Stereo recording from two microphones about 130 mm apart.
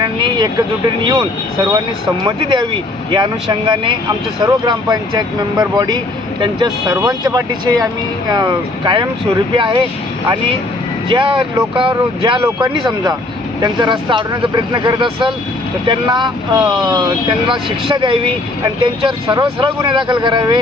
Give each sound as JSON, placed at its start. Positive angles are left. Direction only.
{"t": 0.0, "sound": "vehicle", "side_deg": -35}
{"t": 2.2, "sound": "speech", "side_deg": -35}
{"t": 6.9, "sound": "speech", "side_deg": -25}
{"t": 11.1, "sound": "speech", "side_deg": -40}